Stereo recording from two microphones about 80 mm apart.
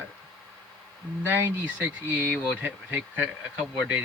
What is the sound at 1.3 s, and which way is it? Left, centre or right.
Speech, right.